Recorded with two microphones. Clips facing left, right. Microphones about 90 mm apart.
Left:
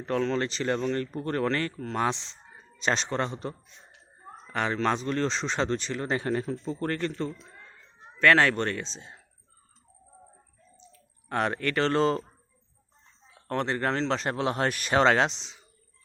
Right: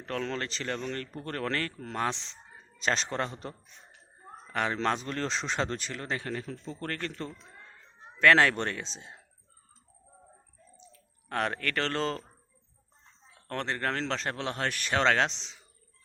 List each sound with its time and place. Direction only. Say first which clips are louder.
0.2 s speech: left 6 dB; 5° left (ahead or behind)
6.1 s speech: left 7 dB; 30° left (ahead or behind)
6.7 s speech: left 5 dB; 15° left (ahead or behind)
8.2 s speech: left 1 dB; centre (ahead or behind)
11.3 s speech: left 3 dB; 5° left (ahead or behind)
13.3 s speech: left 5 dB; 5° left (ahead or behind)